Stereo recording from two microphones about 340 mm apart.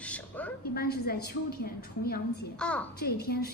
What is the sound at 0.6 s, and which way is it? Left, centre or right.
A woman's voice, left.